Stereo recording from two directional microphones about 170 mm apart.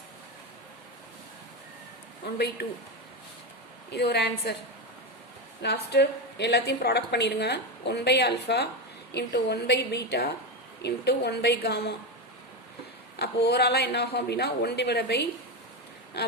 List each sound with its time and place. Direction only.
2.2 s a woman's voice: 75° left (ahead or behind)
3.9 s a woman's voice: 80° left
5.6 s a woman's voice: 75° left (ahead or behind)
13.1 s a woman's voice: 75° left (ahead or behind)
16.1 s a sound: 80° left